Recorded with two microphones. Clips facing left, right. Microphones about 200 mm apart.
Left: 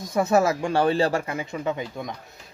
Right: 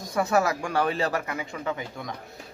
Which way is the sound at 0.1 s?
25° left (ahead or behind).